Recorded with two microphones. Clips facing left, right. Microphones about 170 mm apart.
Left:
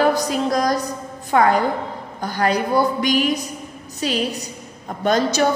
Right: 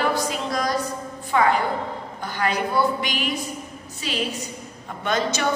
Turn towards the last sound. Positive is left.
turn(degrees=40)  # may be behind; listen again after turning